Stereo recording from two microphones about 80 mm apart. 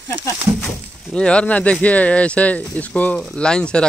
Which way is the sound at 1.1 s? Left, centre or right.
Centre.